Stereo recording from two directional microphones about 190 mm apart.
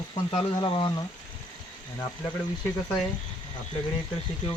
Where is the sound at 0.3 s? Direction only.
30° left (ahead or behind).